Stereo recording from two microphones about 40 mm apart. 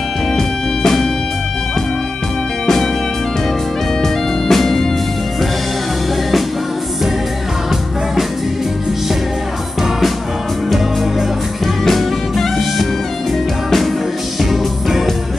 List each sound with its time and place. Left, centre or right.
0.4 s music: centre
2.6 s music: centre
4.0 s music: centre
10.7 s music: centre
14.4 s music: centre